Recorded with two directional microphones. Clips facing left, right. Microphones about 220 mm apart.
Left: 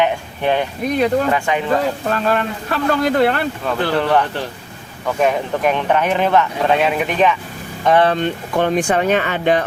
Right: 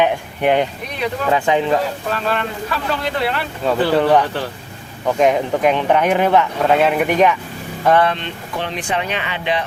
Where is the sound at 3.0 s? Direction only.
45° left (ahead or behind).